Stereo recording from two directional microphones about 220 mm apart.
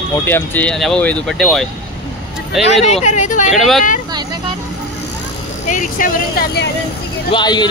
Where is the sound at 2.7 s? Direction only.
30° left (ahead or behind).